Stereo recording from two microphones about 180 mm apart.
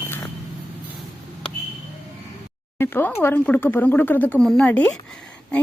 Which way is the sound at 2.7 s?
10° left (ahead or behind).